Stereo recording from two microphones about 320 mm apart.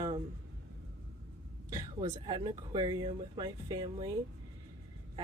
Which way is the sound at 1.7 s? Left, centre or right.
Centre.